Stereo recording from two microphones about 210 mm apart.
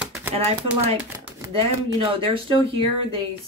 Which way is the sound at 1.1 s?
10° right (ahead or behind).